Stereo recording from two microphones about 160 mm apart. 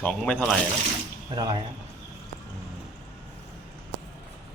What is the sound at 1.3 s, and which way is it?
Speech, 25° right (ahead or behind).